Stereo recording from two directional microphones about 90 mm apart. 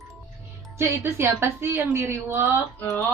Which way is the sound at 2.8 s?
35° left (ahead or behind).